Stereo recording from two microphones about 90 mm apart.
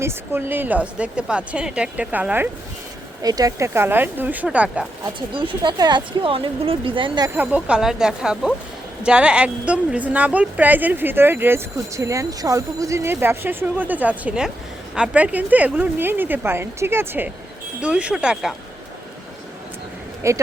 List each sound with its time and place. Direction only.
0.0 s a woman's voice: 25° right (ahead or behind)
3.2 s speech: 45° right (ahead or behind)
3.8 s a woman's voice: 20° right (ahead or behind)
5.3 s speech: 70° right (ahead or behind)
5.7 s speech: 50° right (ahead or behind)
6.2 s speech: 85° right
7.3 s a woman's voice: 10° right (ahead or behind)
11.9 s speech: 35° right (ahead or behind)
13.1 s speech: 25° right (ahead or behind)
17.7 s a woman's voice: 15° right (ahead or behind)
20.2 s speech: 35° right (ahead or behind)